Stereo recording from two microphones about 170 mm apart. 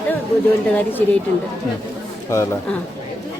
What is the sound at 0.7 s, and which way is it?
Speech, 10° left (ahead or behind).